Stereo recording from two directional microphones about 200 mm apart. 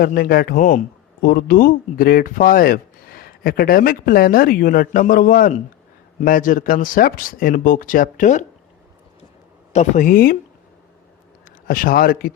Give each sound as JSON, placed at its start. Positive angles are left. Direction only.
{"t": 0.0, "sound": "speech", "side_deg": 45}
{"t": 9.7, "sound": "speech", "side_deg": 40}
{"t": 11.7, "sound": "speech", "side_deg": 45}